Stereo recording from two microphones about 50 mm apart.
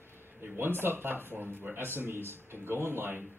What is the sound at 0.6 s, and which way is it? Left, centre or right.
A man's voice, right.